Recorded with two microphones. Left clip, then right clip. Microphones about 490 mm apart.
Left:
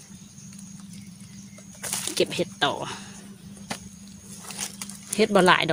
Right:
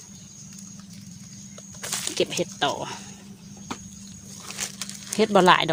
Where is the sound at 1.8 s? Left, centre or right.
Right.